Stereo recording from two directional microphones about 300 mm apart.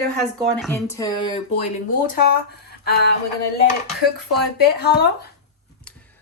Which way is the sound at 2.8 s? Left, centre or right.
Left.